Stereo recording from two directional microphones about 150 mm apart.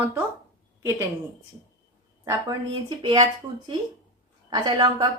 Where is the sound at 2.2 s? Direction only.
20° right (ahead or behind).